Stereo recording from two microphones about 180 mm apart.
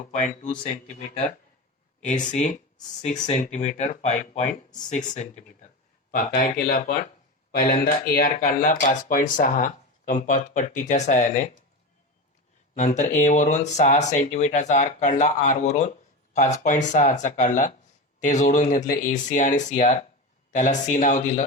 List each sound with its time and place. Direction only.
0.1 s speech: 40° left (ahead or behind)
2.0 s speech: 40° left (ahead or behind)
12.7 s speech: 40° left (ahead or behind)